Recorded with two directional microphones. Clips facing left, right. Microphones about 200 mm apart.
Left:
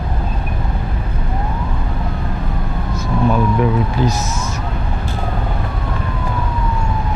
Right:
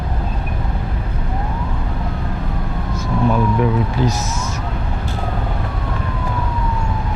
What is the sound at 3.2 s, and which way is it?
Speech, 25° left (ahead or behind).